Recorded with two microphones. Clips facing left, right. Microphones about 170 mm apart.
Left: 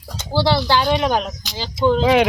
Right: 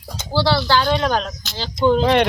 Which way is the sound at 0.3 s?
15° left (ahead or behind).